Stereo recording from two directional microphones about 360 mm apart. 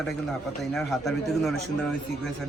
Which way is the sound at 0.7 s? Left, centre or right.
Centre.